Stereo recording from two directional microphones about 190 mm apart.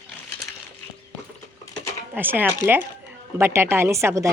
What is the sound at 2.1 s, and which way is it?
A woman's voice, 10° right (ahead or behind).